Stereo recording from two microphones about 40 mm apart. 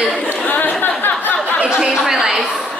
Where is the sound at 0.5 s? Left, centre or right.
Left.